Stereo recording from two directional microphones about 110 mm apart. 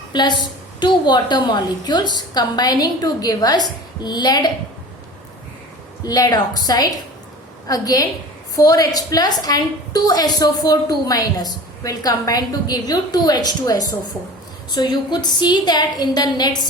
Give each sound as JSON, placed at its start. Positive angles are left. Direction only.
{"t": 0.1, "sound": "a woman's voice", "side_deg": 40}
{"t": 6.1, "sound": "a woman's voice", "side_deg": 35}